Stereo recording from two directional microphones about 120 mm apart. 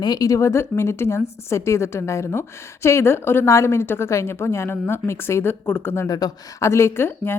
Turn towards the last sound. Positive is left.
turn(degrees=20)  # may be behind; listen again after turning